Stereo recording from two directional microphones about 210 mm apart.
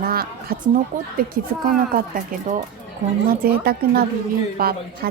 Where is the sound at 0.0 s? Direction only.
45° right (ahead or behind).